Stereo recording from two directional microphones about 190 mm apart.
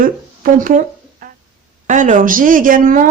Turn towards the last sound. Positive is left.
turn(degrees=-45)  # may be behind; listen again after turning